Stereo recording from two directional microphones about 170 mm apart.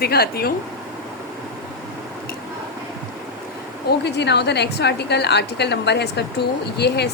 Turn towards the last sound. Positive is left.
turn(degrees=75)  # may be behind; listen again after turning